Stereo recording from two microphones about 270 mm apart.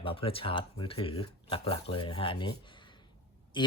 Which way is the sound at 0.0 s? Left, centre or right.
Centre.